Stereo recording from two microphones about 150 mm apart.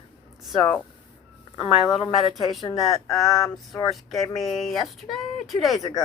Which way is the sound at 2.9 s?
20° left (ahead or behind).